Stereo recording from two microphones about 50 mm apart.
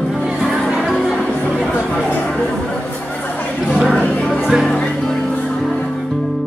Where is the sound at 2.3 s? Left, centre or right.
Left.